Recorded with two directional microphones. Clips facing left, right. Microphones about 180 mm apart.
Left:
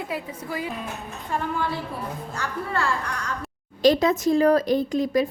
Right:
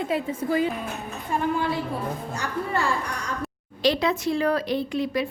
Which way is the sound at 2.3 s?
15° right (ahead or behind).